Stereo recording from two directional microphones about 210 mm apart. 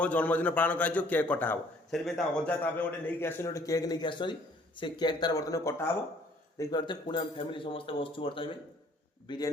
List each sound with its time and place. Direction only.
0.0 s a man's voice: 5° left (ahead or behind)